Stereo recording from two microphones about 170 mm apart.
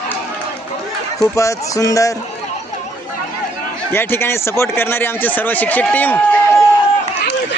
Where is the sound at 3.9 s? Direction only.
15° left (ahead or behind).